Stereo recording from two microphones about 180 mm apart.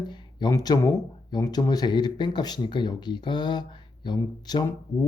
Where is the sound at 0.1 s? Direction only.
25° left (ahead or behind).